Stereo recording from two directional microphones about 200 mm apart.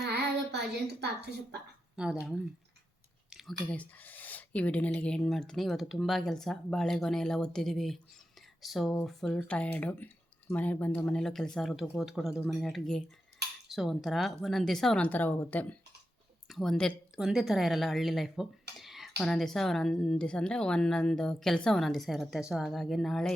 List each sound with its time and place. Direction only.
0.0 s child singing: 55° right (ahead or behind)
1.2 s a woman's voice: 55° right (ahead or behind)
2.0 s speech: 5° right (ahead or behind)
3.2 s a sound: centre (ahead or behind)
3.7 s speech: 10° left (ahead or behind)
18.8 s a sound: centre (ahead or behind)
19.1 s speech: 5° left (ahead or behind)